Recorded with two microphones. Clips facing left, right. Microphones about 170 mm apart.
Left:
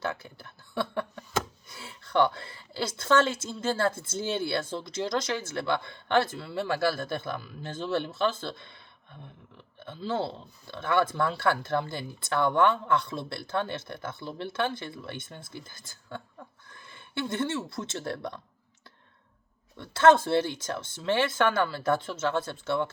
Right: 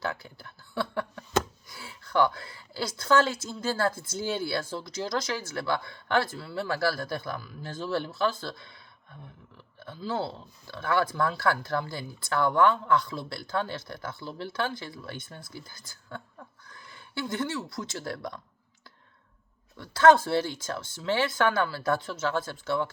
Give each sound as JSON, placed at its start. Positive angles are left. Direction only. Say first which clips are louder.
{"t": 0.0, "sound": "a sound", "louder": "even", "side_deg": 20}
{"t": 1.8, "sound": "a woman's voice", "louder": "even", "side_deg": 25}
{"t": 9.8, "sound": "a woman's voice", "louder": "left 1 dB", "side_deg": 25}
{"t": 17.5, "sound": "a woman's voice", "louder": "left 1 dB", "side_deg": 25}
{"t": 19.8, "sound": "a woman's voice", "louder": "right 1 dB", "side_deg": 25}